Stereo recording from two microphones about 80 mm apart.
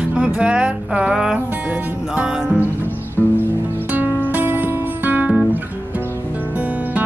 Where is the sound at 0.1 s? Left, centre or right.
Centre.